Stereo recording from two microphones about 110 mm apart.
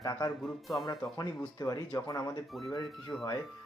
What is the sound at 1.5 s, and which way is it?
Speech, 35° left (ahead or behind).